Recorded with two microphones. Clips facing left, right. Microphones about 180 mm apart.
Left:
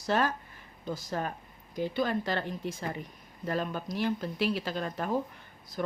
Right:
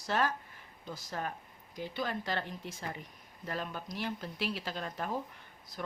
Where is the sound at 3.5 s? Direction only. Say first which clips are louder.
Left 7 dB; 50° left (ahead or behind).